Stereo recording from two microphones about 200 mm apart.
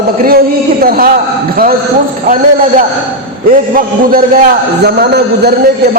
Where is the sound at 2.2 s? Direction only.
40° right (ahead or behind).